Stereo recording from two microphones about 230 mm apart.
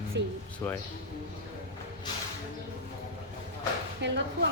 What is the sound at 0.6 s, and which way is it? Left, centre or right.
Speech, centre.